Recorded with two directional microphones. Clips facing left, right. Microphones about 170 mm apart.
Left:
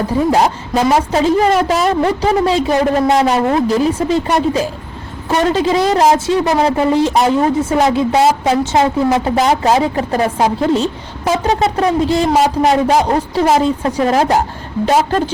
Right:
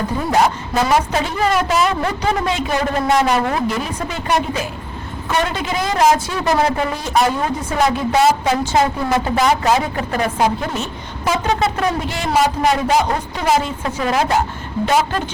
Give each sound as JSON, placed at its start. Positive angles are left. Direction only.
{"t": 0.3, "sound": "a woman's voice", "side_deg": 35}